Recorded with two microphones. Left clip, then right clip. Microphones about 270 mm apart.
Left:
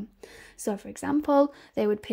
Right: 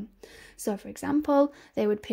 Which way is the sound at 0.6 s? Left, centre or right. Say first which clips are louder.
Left 1 dB; centre.